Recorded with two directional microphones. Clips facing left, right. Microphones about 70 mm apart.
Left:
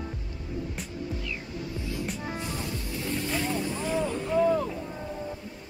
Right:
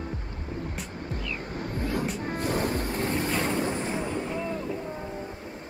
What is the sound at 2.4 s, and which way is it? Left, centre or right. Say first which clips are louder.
Ocean: right 7 dB; right.